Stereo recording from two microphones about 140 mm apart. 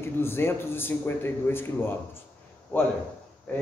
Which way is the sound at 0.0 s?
15° left (ahead or behind).